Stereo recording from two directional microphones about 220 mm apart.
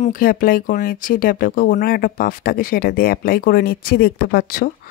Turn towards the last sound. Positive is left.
turn(degrees=45)  # may be behind; listen again after turning